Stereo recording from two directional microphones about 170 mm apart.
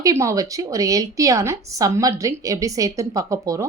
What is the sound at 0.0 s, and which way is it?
A woman's voice, 20° right (ahead or behind).